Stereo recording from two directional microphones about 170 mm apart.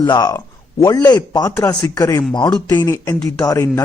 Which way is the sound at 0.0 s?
25° left (ahead or behind).